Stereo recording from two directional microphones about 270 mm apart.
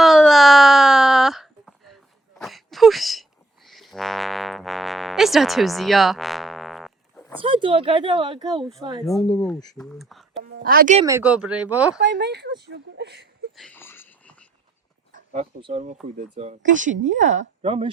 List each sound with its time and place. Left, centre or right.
0.0 s a sound: centre
3.7 s music: centre
7.3 s speech: centre
9.7 s speech: centre
10.4 s speech: right
11.0 s speech: centre
11.9 s speech: right
13.6 s whispering: centre
15.1 s speech: right